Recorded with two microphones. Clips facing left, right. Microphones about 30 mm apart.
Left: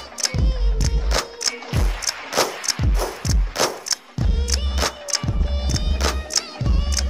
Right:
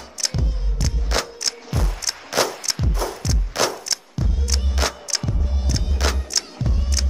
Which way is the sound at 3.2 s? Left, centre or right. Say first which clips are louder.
Even; centre.